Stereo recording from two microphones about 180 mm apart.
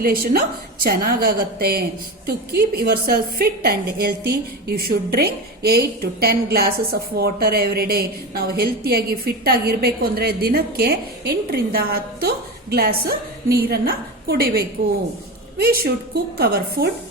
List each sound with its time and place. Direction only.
0.0 s a woman's voice: 55° right (ahead or behind)